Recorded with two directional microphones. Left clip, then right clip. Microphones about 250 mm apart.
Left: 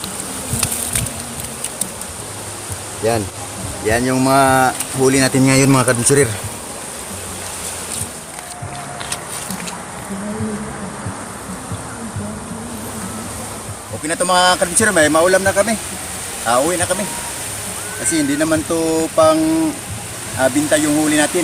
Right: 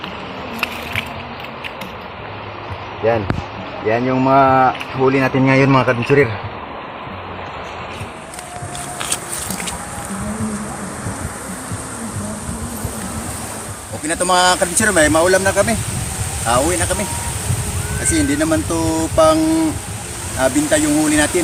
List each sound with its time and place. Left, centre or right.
3.8 s speech: centre
14.1 s speech: centre
18.1 s speech: centre
20.4 s speech: centre